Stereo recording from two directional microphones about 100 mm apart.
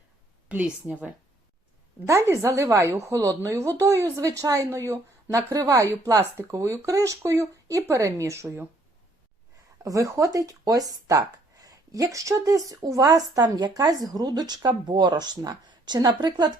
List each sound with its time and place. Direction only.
0.4 s a woman's voice: 15° right (ahead or behind)
2.0 s speech: 30° right (ahead or behind)
9.8 s speech: 35° right (ahead or behind)